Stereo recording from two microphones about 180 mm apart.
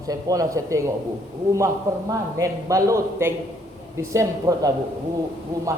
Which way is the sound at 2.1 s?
20° right (ahead or behind).